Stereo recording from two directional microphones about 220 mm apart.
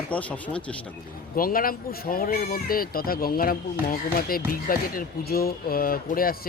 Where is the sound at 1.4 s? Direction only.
40° left (ahead or behind).